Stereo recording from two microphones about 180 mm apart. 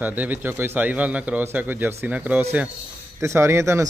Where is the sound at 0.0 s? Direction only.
10° right (ahead or behind).